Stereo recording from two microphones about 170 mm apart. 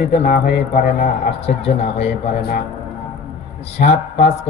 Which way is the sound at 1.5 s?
40° left (ahead or behind).